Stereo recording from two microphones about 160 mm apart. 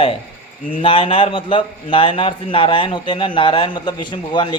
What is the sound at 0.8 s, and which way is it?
A man's voice, 35° left (ahead or behind).